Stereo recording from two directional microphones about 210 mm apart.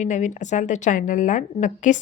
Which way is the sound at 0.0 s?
35° left (ahead or behind).